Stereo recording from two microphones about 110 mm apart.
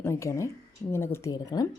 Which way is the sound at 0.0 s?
25° left (ahead or behind).